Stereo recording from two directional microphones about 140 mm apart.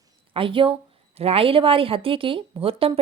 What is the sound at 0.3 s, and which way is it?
A woman's voice, 40° right (ahead or behind).